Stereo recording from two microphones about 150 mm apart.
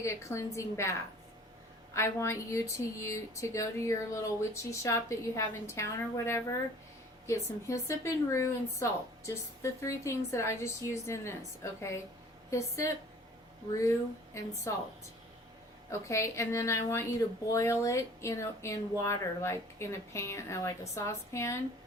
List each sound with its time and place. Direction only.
0.0 s speech: 20° left (ahead or behind)
15.9 s speech: 20° left (ahead or behind)